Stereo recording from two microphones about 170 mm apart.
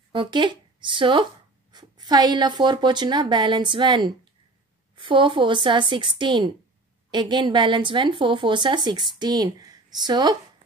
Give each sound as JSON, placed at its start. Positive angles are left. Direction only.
{"t": 0.1, "sound": "a woman's voice", "side_deg": -30}